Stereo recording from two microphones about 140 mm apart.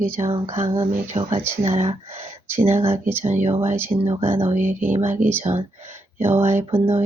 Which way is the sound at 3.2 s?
55° right (ahead or behind).